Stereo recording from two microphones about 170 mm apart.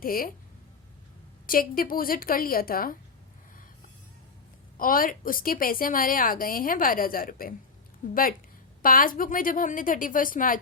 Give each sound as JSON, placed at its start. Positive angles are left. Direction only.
{"t": 0.0, "sound": "a woman's voice", "side_deg": 55}
{"t": 1.5, "sound": "a woman's voice", "side_deg": 55}
{"t": 4.8, "sound": "a woman's voice", "side_deg": 55}